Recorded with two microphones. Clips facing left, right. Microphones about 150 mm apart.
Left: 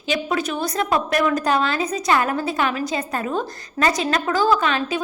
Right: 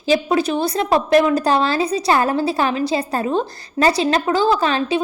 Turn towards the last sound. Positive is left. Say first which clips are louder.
# right 2 dB
turn(degrees=-35)  # may be behind; listen again after turning